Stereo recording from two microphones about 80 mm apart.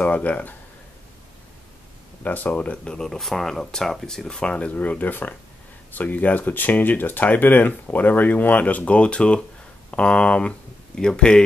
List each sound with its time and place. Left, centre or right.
0.0 s speech: centre
2.2 s speech: left